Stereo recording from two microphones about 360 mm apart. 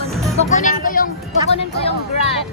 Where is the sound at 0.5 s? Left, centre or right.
Left.